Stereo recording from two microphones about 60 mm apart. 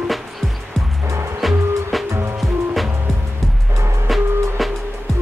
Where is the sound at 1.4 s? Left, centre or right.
Centre.